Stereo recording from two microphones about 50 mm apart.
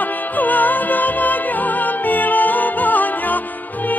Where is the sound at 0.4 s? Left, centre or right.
Left.